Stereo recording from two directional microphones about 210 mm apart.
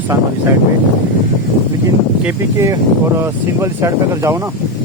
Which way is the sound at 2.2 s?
15° right (ahead or behind).